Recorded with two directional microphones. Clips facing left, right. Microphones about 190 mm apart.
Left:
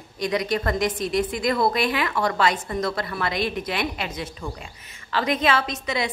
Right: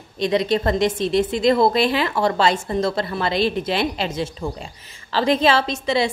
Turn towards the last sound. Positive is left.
turn(degrees=-30)  # may be behind; listen again after turning